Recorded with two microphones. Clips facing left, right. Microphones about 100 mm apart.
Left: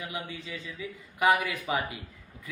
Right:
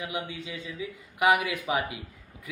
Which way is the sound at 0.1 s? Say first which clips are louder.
Right 3 dB; 15° right (ahead or behind).